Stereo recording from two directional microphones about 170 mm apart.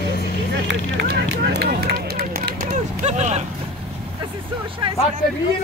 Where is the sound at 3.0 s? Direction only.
40° right (ahead or behind).